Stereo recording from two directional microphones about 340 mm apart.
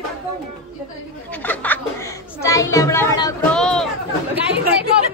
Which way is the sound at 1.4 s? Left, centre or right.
Centre.